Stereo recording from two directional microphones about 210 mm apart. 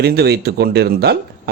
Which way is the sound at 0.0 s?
50° right (ahead or behind).